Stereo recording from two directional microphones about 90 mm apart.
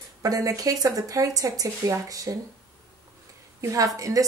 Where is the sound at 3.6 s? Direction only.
40° right (ahead or behind).